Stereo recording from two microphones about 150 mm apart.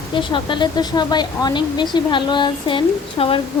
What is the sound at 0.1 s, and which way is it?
Speech, 35° left (ahead or behind).